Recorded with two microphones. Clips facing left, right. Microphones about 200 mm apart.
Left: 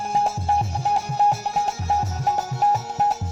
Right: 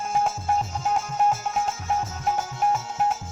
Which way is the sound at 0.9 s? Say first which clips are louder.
Left 2 dB; 35° left (ahead or behind).